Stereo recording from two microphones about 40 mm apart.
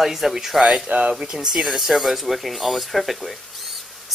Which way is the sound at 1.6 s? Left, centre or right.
Centre.